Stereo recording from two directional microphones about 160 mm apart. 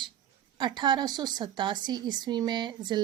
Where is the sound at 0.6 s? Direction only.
25° right (ahead or behind).